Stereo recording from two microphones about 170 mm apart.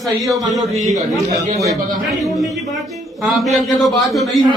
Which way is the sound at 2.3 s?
Centre (ahead or behind).